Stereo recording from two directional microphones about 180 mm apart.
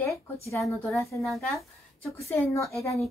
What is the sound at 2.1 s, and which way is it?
Speech, 15° left (ahead or behind).